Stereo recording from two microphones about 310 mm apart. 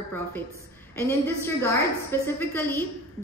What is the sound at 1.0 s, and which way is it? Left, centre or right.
A woman's voice, centre.